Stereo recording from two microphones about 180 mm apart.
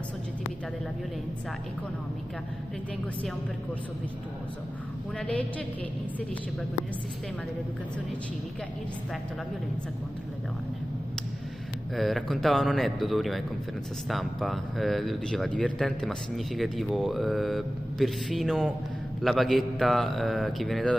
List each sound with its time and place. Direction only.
5.2 s a woman's voice: 10° left (ahead or behind)
11.9 s speech: centre (ahead or behind)